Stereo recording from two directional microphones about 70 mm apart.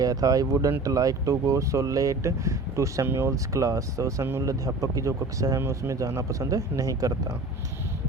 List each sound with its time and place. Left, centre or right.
0.0 s speech: right
3.1 s speech: right
3.3 s speech: right
5.5 s speech: right